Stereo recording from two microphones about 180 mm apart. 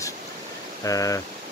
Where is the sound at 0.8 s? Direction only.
20° left (ahead or behind).